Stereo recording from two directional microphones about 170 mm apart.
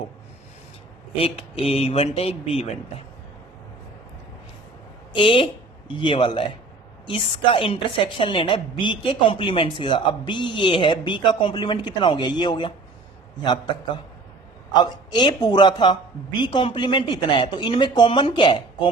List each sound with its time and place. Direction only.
1.1 s speech: 35° left (ahead or behind)
5.1 s a woman's voice: 30° left (ahead or behind)